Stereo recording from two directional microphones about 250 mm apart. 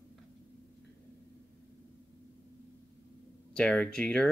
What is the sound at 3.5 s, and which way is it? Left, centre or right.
Speech, centre.